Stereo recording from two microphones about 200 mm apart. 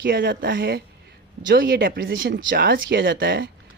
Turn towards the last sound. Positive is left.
turn(degrees=-55)  # may be behind; listen again after turning